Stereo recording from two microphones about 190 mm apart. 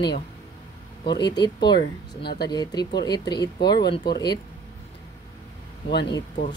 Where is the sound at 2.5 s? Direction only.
20° left (ahead or behind).